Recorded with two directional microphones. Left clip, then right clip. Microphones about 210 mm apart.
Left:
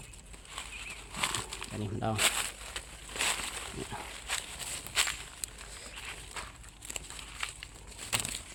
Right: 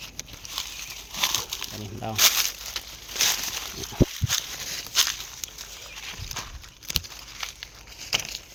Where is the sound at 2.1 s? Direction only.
55° right (ahead or behind).